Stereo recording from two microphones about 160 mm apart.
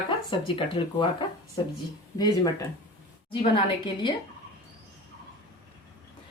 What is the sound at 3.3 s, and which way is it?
Speech, 30° left (ahead or behind).